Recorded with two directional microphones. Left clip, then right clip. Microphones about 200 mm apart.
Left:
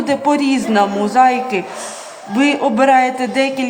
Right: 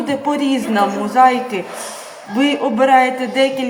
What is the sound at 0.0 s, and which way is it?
A man's voice, 30° left (ahead or behind).